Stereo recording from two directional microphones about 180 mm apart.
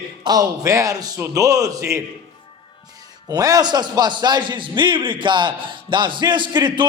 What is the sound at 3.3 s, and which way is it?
A man's voice, 20° right (ahead or behind).